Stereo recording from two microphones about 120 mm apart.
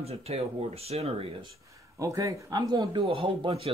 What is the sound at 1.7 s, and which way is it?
Speech, 25° right (ahead or behind).